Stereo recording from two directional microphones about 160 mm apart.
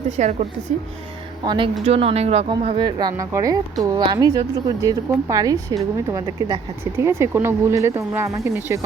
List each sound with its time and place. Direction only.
0.2 s a woman's voice: 50° right (ahead or behind)
1.5 s speech: 30° right (ahead or behind); by 8.8 s 15° right (ahead or behind)